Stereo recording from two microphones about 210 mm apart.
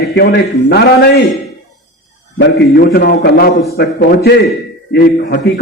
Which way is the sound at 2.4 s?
50° left (ahead or behind).